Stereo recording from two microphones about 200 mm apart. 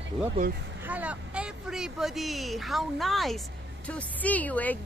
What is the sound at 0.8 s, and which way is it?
Speech, 5° right (ahead or behind).